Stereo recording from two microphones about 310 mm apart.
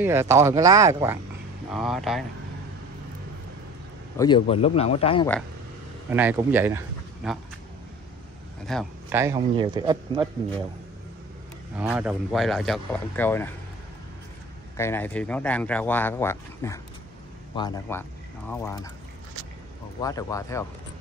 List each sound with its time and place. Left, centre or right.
0.0 s speech: centre
4.2 s speech: centre
6.0 s speech: centre
8.6 s speech: centre
9.2 s speech: centre
11.7 s speech: centre
14.8 s speech: centre
20.0 s speech: centre